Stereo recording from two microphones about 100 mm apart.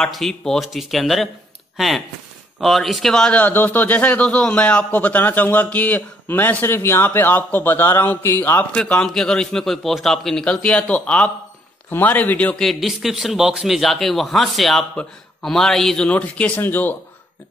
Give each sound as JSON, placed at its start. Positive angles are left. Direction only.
{"t": 0.0, "sound": "a man's voice", "side_deg": 5}
{"t": 8.7, "sound": "speech", "side_deg": 10}
{"t": 12.6, "sound": "a man's voice", "side_deg": 0}